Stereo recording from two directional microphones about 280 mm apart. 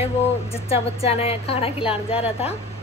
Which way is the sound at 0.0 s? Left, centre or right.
Left.